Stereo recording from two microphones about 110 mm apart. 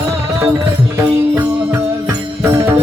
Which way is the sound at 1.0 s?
20° right (ahead or behind).